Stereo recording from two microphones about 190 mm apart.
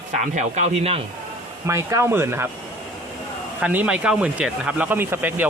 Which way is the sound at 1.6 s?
15° right (ahead or behind).